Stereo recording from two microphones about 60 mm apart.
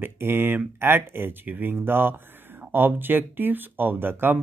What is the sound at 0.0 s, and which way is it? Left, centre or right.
Speech, right.